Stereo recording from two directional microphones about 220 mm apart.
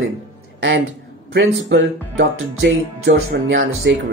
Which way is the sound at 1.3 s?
60° right (ahead or behind).